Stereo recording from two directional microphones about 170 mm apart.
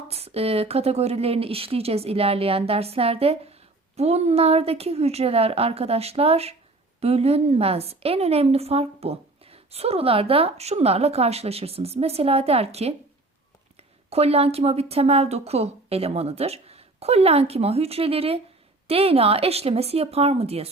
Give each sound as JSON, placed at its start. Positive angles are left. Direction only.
{"t": 0.1, "sound": "a woman's voice", "side_deg": -35}